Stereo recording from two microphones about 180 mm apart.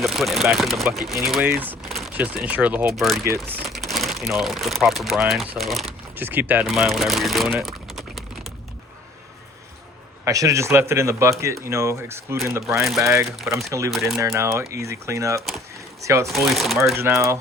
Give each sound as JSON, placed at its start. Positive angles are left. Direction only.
{"t": 0.0, "sound": "speech", "side_deg": 0}
{"t": 3.2, "sound": "speech", "side_deg": -15}
{"t": 3.7, "sound": "speech", "side_deg": 0}
{"t": 6.1, "sound": "speech", "side_deg": -10}
{"t": 7.6, "sound": "a sound", "side_deg": 0}
{"t": 10.2, "sound": "speech", "side_deg": -20}
{"t": 12.8, "sound": "speech", "side_deg": 0}
{"t": 13.1, "sound": "speech", "side_deg": -15}
{"t": 13.9, "sound": "speech", "side_deg": 0}
{"t": 14.2, "sound": "speech", "side_deg": -15}
{"t": 15.4, "sound": "speech", "side_deg": 0}
{"t": 16.0, "sound": "speech", "side_deg": -15}
{"t": 16.2, "sound": "speech", "side_deg": 0}
{"t": 16.9, "sound": "speech", "side_deg": -15}